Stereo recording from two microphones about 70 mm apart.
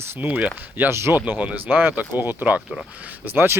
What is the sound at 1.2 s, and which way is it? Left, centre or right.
Speech, right.